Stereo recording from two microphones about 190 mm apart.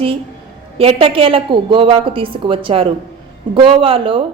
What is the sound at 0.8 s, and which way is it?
A woman's voice, 30° right (ahead or behind).